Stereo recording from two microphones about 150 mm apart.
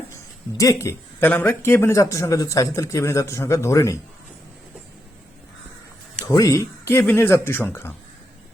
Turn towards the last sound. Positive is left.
turn(degrees=15)  # may be behind; listen again after turning